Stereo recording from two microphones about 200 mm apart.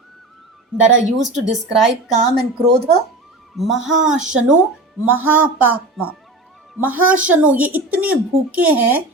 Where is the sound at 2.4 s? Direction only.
55° right (ahead or behind).